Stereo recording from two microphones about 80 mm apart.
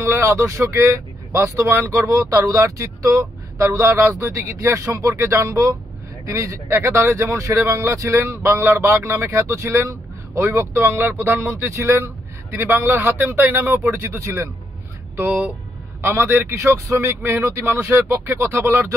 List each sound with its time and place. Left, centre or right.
0.0 s speech: right
16.0 s speech: right
17.1 s speech: right